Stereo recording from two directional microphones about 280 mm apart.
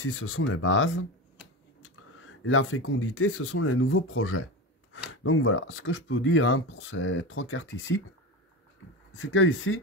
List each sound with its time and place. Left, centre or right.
0.0 s speech: left
9.2 s speech: left